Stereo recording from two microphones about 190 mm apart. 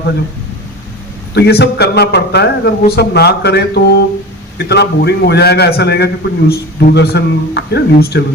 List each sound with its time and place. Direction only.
1.3 s a man's voice: 60° left (ahead or behind)